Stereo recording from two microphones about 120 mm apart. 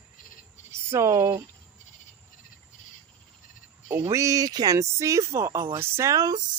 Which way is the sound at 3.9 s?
20° right (ahead or behind).